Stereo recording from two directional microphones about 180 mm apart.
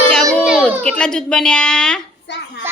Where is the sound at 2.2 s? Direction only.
70° left (ahead or behind).